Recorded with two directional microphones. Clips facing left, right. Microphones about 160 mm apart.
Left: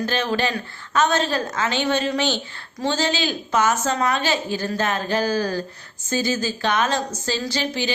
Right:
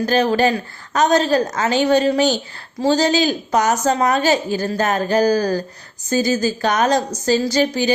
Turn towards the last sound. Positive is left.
turn(degrees=-40)  # may be behind; listen again after turning